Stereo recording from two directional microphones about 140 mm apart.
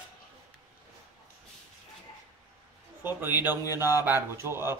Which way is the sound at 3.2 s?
15° right (ahead or behind).